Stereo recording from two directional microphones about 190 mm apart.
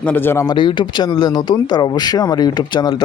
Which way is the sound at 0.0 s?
10° left (ahead or behind).